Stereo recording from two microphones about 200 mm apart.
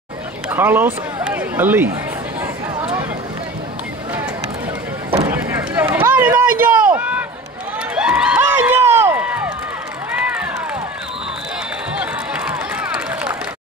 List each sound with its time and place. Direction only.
0.5 s a man's voice: 10° right (ahead or behind)
2.4 s a sound: 15° right (ahead or behind)
5.3 s vehicle: 10° right (ahead or behind)
6.4 s run: 45° right (ahead or behind)
6.9 s run: 5° right (ahead or behind)
12.0 s run: 5° right (ahead or behind)